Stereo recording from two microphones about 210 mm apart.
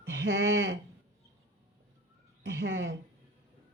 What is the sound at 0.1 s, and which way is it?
Speech, 60° right (ahead or behind).